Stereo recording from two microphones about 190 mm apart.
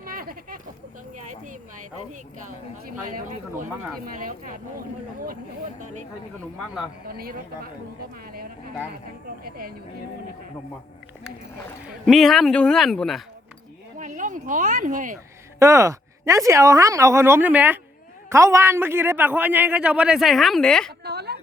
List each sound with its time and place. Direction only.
0.0 s a sound: 50° right (ahead or behind)
3.0 s speech: 45° right (ahead or behind)
7.1 s speech: 50° right (ahead or behind)
11.9 s a man's voice: centre (ahead or behind)
14.0 s speech: 40° right (ahead or behind)
15.5 s a man's voice: 15° right (ahead or behind); by 20.9 s 5° left (ahead or behind)
21.0 s a sound: 60° right (ahead or behind)